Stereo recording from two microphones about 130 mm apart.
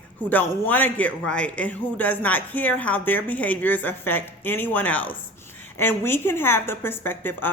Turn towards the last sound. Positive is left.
turn(degrees=15)  # may be behind; listen again after turning